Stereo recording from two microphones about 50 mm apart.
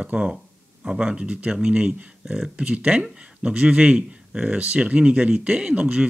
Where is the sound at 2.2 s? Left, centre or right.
Centre.